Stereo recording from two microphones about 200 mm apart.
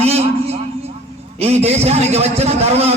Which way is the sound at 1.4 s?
30° right (ahead or behind).